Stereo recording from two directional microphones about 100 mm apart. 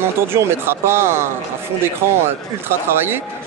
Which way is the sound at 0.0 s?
25° right (ahead or behind).